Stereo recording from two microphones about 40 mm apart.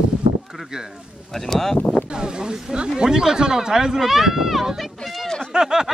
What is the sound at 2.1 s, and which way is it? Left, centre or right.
Speech, right.